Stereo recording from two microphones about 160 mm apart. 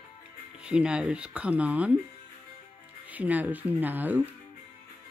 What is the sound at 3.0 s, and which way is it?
Speech, 10° right (ahead or behind).